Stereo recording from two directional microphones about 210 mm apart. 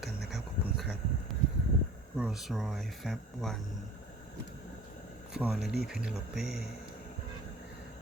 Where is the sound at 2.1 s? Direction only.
5° right (ahead or behind).